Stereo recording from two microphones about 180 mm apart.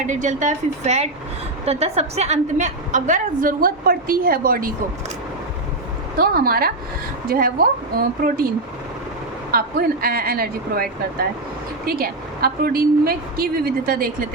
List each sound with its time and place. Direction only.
0.0 s a woman's voice: 45° right (ahead or behind)
6.1 s a woman's voice: 55° right (ahead or behind)
9.5 s a woman's voice: 55° right (ahead or behind)
11.9 s a woman's voice: 55° right (ahead or behind)